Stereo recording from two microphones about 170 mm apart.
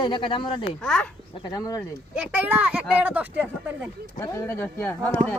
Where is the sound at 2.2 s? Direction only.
10° right (ahead or behind).